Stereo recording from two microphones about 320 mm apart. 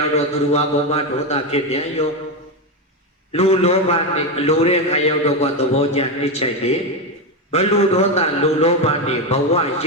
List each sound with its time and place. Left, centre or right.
0.5 s a man's voice: centre
3.3 s a man's voice: centre